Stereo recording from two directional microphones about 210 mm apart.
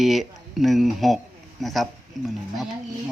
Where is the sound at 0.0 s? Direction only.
Centre (ahead or behind).